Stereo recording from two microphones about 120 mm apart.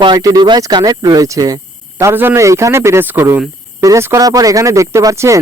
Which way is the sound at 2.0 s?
20° right (ahead or behind).